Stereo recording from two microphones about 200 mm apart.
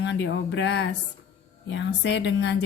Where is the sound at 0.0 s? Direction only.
60° left (ahead or behind).